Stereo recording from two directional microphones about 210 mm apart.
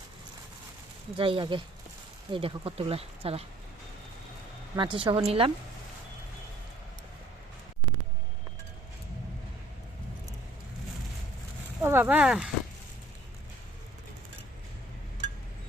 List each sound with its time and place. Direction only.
1.1 s speech: 25° right (ahead or behind)
4.8 s speech: 25° right (ahead or behind)
11.8 s speech: 10° right (ahead or behind)